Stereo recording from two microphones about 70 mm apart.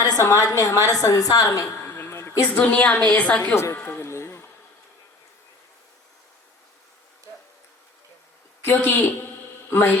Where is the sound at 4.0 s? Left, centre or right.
Left.